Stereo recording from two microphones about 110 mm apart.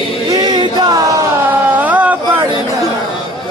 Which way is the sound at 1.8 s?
15° right (ahead or behind).